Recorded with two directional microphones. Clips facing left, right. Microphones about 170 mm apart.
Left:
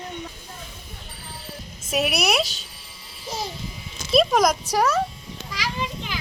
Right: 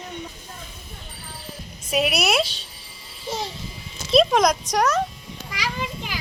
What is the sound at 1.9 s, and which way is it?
Speech, centre (ahead or behind).